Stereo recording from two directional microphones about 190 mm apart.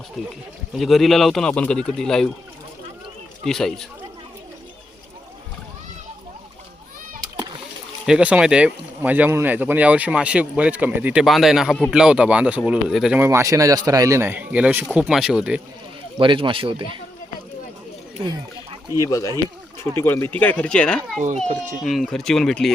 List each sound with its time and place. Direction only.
0.2 s a man's voice: centre (ahead or behind)
3.4 s a man's voice: centre (ahead or behind)
7.2 s splash: 20° right (ahead or behind)
8.0 s a man's voice: 5° right (ahead or behind)
16.1 s speech: 25° right (ahead or behind)
18.9 s speech: 15° left (ahead or behind)
21.2 s a child's voice: 40° right (ahead or behind)
21.8 s a man's voice: centre (ahead or behind)